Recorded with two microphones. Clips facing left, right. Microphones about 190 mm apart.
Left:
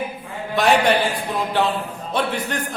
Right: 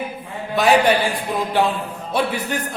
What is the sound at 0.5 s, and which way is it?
Speech, centre (ahead or behind).